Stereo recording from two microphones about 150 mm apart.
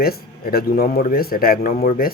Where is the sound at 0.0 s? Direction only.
90° left.